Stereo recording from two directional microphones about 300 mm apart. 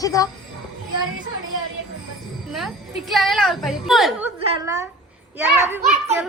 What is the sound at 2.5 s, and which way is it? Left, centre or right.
A woman's voice, centre.